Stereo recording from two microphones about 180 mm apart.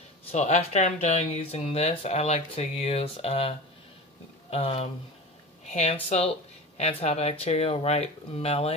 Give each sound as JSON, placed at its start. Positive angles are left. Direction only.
{"t": 0.3, "sound": "speech", "side_deg": 35}